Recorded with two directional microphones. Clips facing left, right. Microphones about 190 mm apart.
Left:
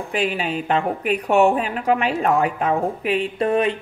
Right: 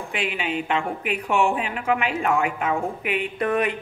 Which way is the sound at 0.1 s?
40° left (ahead or behind).